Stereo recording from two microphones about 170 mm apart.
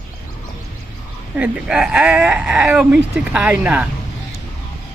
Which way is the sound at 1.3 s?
10° right (ahead or behind).